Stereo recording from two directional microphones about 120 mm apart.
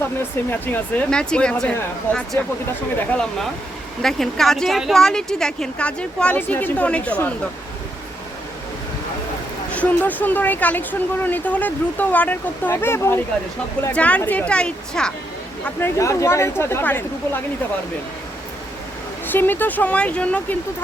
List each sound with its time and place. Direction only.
0.0 s speech: 15° left (ahead or behind)
2.9 s speech: 10° left (ahead or behind)
9.7 s speech: 10° left (ahead or behind)
16.0 s speech: 25° left (ahead or behind)
19.3 s speech: 15° left (ahead or behind)